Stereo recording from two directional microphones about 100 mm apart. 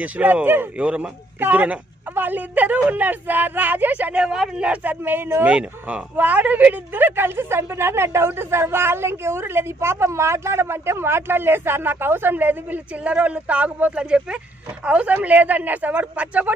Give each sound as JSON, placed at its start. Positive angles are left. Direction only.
{"t": 0.0, "sound": "a man's voice", "side_deg": -15}